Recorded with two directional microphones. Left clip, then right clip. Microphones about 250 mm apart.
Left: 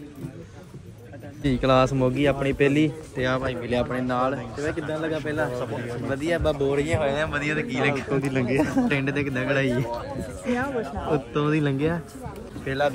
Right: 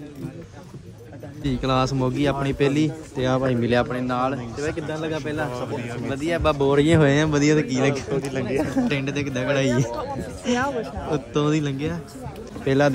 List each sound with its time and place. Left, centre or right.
1.4 s a man's voice: centre
6.9 s speech: right
7.2 s a man's voice: right
8.2 s speech: left
8.8 s speech: centre